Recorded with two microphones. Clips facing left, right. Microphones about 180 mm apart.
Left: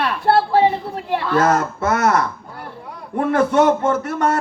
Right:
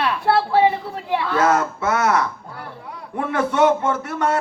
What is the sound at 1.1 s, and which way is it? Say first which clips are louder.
A man's voice: left 1 dB; 40° left (ahead or behind).